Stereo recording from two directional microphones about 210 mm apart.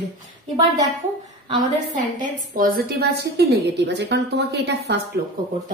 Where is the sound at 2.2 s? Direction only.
40° right (ahead or behind).